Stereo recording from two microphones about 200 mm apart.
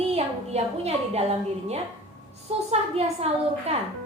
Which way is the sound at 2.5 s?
30° right (ahead or behind).